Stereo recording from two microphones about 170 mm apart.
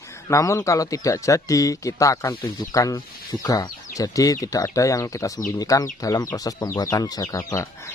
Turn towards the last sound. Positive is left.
turn(degrees=20)  # may be behind; listen again after turning